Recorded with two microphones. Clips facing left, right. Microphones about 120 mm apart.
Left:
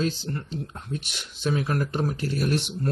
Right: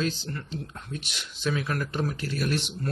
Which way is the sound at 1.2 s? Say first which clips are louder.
Left 2 dB; 45° left (ahead or behind).